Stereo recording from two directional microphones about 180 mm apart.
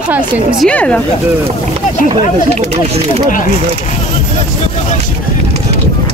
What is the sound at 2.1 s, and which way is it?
Speech, 35° right (ahead or behind).